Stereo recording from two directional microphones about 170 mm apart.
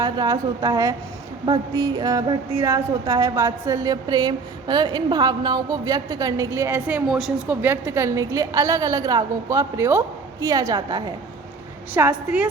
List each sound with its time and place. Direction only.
0.0 s a woman's voice: 25° right (ahead or behind)
11.9 s a woman's voice: 10° right (ahead or behind)